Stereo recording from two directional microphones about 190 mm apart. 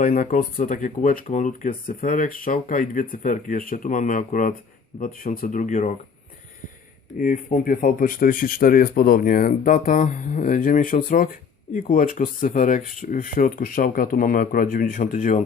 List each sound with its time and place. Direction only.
0.0 s speech: 45° left (ahead or behind)
7.2 s speech: 45° left (ahead or behind)